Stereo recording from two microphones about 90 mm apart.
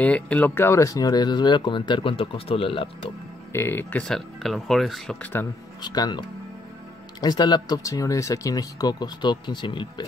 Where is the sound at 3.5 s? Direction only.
25° left (ahead or behind).